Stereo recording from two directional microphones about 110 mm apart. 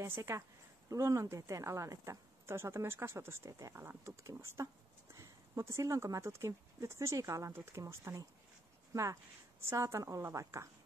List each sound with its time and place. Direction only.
0.0 s speech: 25° right (ahead or behind)